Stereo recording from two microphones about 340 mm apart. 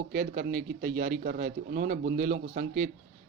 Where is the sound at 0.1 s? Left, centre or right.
Right.